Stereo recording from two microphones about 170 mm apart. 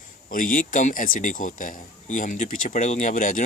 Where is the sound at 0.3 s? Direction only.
55° left (ahead or behind).